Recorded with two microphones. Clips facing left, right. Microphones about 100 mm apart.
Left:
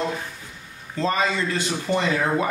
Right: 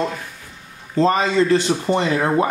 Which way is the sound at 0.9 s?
30° right (ahead or behind).